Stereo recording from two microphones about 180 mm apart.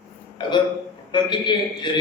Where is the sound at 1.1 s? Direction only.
25° left (ahead or behind).